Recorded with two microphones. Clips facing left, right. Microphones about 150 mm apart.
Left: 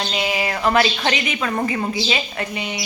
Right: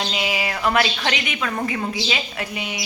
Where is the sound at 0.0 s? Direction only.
5° right (ahead or behind).